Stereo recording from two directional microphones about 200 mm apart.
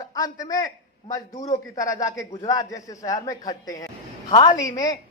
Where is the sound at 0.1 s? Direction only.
20° left (ahead or behind).